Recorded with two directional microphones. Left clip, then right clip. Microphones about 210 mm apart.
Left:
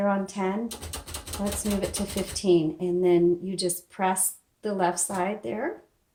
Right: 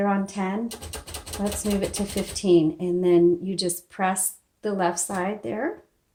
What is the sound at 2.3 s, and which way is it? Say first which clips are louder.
A woman's voice: right 3 dB; 45° right (ahead or behind).